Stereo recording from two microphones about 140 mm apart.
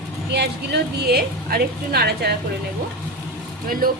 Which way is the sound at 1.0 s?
90° right.